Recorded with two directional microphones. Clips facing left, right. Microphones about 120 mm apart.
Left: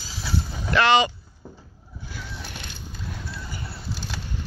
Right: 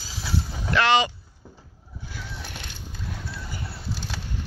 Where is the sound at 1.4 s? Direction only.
60° left (ahead or behind).